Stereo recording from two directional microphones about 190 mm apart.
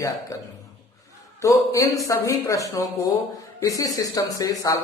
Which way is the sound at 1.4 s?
15° left (ahead or behind).